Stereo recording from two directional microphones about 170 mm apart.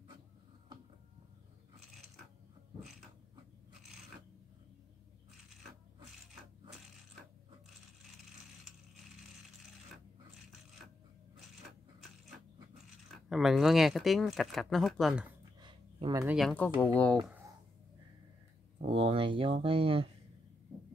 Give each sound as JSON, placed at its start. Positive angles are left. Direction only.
{"t": 13.1, "sound": "speech", "side_deg": 0}
{"t": 15.6, "sound": "dog", "side_deg": -25}
{"t": 16.3, "sound": "speech", "side_deg": 0}
{"t": 18.9, "sound": "a sound", "side_deg": -35}